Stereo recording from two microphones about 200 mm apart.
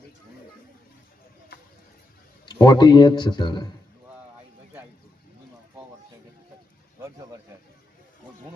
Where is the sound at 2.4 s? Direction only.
20° left (ahead or behind).